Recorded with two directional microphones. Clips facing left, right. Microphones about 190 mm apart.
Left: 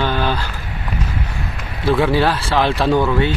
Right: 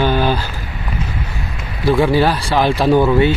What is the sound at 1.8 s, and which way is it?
Speech, centre (ahead or behind).